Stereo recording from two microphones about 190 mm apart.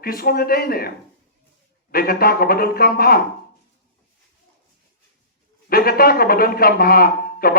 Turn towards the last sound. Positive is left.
turn(degrees=50)  # may be behind; listen again after turning